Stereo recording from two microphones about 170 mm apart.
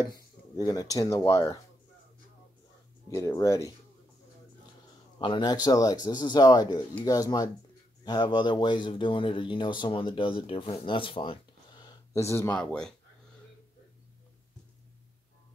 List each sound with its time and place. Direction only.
0.0 s speech: 20° left (ahead or behind)
3.1 s speech: 20° left (ahead or behind)
5.2 s speech: 25° left (ahead or behind); by 12.9 s 5° left (ahead or behind)